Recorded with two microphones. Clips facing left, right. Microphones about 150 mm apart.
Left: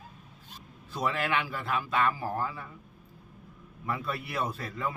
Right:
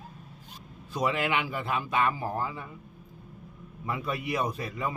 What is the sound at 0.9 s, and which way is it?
Speech, 15° right (ahead or behind).